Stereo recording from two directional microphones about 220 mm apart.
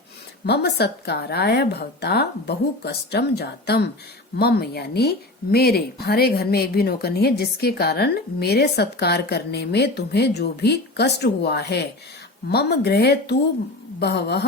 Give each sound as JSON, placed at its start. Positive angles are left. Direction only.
{"t": 0.4, "sound": "a woman's voice", "side_deg": 50}